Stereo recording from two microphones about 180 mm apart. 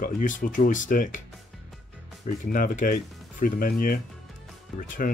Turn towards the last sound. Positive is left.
turn(degrees=45)  # may be behind; listen again after turning